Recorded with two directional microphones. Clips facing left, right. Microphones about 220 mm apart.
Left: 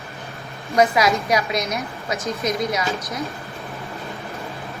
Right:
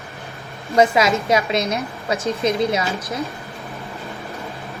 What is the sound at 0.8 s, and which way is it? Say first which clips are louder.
A woman's voice: right 2 dB; 25° right (ahead or behind).